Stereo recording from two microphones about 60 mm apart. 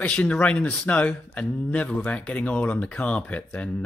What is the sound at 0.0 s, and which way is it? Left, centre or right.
Speech, left.